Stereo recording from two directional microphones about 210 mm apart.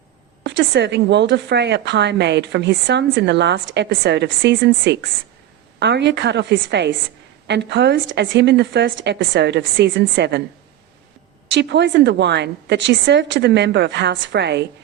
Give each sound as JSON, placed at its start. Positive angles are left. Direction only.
{"t": 0.4, "sound": "a woman's voice", "side_deg": -55}
{"t": 11.5, "sound": "a woman's voice", "side_deg": -55}